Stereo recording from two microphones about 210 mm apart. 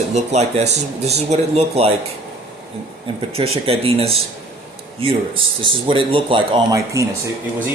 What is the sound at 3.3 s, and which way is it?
Speech, 30° right (ahead or behind).